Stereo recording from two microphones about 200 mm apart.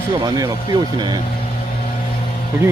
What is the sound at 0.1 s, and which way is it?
Speech, 20° right (ahead or behind).